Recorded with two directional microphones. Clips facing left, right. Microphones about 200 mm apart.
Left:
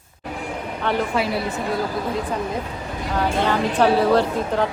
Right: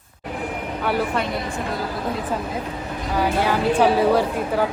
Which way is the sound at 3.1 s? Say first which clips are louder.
Even; 10° right (ahead or behind).